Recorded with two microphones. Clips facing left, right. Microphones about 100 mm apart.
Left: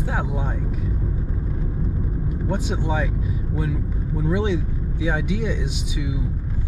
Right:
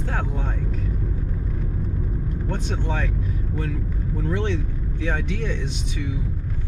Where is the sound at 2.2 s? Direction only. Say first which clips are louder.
Left 5 dB; 10° left (ahead or behind).